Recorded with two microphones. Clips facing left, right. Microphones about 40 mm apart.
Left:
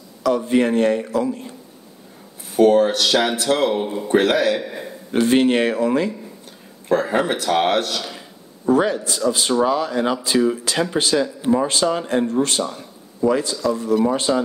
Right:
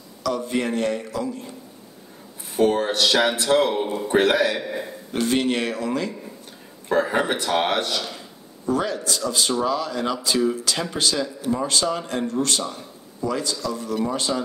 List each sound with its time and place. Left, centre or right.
0.2 s speech: centre
2.5 s speech: centre
5.1 s speech: centre
6.9 s speech: centre
8.6 s speech: centre
13.2 s speech: centre
13.6 s speech: centre